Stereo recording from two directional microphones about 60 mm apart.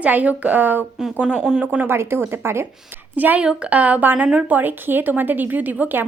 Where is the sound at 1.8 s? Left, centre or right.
Right.